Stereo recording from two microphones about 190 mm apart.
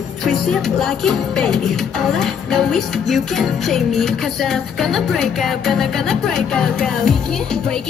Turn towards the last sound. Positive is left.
turn(degrees=5)  # may be behind; listen again after turning